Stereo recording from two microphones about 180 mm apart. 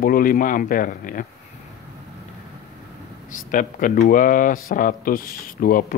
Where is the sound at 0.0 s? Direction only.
50° left (ahead or behind).